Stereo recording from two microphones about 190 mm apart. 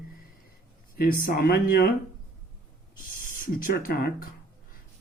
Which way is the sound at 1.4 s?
50° left (ahead or behind).